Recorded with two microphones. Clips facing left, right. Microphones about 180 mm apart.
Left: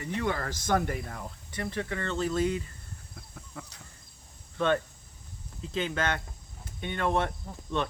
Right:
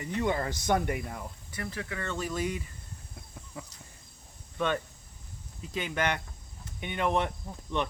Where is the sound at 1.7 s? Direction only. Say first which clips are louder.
Left 4 dB; 10° right (ahead or behind).